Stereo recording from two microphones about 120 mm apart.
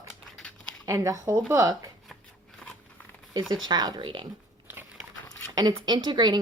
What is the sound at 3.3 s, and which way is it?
Speech, 35° right (ahead or behind).